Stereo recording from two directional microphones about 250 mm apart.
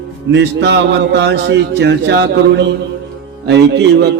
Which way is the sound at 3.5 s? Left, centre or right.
Right.